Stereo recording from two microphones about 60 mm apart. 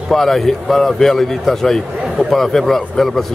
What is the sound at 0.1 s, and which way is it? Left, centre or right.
A man's voice, centre.